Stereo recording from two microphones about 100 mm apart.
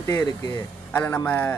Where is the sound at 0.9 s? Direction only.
15° left (ahead or behind).